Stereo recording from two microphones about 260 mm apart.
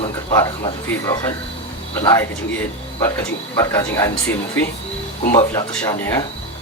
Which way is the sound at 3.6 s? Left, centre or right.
Centre.